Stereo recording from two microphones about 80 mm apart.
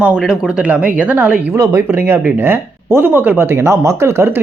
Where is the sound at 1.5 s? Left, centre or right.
Right.